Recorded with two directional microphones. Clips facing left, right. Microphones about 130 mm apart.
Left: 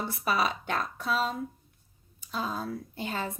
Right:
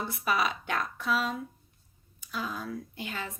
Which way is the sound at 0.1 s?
30° left (ahead or behind).